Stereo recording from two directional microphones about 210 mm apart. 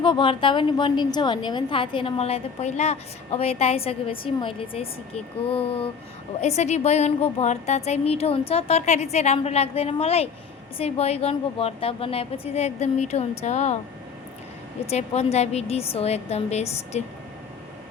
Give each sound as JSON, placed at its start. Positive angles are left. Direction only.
{"t": 0.0, "sound": "a woman's voice", "side_deg": 25}
{"t": 14.8, "sound": "a woman's voice", "side_deg": 30}